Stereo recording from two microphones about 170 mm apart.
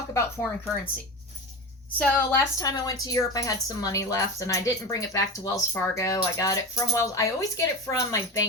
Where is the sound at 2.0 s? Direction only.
10° left (ahead or behind).